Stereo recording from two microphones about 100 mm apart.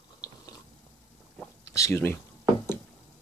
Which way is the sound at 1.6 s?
30° left (ahead or behind).